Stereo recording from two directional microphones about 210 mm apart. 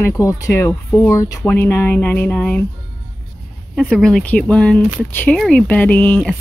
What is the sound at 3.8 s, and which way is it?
Speech, centre (ahead or behind).